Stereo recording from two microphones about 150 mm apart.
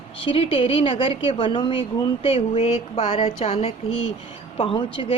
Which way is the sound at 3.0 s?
50° left (ahead or behind).